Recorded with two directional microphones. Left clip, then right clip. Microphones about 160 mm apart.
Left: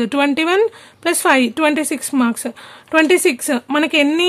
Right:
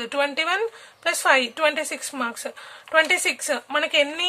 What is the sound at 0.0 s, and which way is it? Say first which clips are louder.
Speech: left 7 dB; 45° left (ahead or behind).